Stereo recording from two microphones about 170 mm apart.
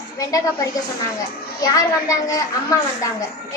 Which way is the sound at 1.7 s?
20° left (ahead or behind).